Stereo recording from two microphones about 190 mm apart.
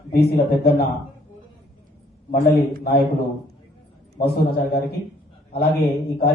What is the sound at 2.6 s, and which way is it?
Speech, 55° left (ahead or behind).